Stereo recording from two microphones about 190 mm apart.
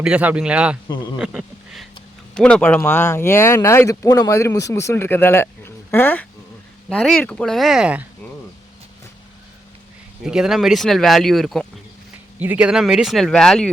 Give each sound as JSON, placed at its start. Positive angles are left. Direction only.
{"t": 0.0, "sound": "speech", "side_deg": -5}
{"t": 0.9, "sound": "a man's voice", "side_deg": 20}
{"t": 1.2, "sound": "speech", "side_deg": -5}
{"t": 10.2, "sound": "speech", "side_deg": -5}